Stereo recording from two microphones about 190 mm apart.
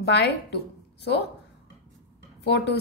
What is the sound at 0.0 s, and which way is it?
Speech, 60° left (ahead or behind).